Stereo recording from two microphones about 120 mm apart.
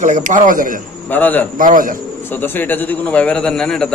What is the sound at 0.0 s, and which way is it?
Speech, 90° right.